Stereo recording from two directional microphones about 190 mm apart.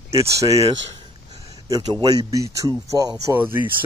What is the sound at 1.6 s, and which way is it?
Speech, 20° right (ahead or behind).